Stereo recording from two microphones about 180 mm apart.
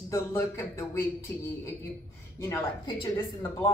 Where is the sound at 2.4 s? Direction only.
15° left (ahead or behind).